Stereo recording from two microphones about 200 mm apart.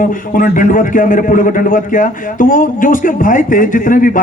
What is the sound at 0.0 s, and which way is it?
A man's voice, 45° left (ahead or behind).